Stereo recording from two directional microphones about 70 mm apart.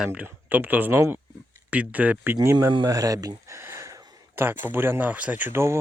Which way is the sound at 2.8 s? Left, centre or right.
Right.